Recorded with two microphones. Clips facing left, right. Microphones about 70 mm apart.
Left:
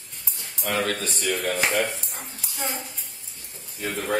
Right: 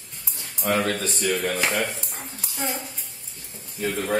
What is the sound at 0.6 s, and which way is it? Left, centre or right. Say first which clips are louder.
Speech: right 3 dB; right.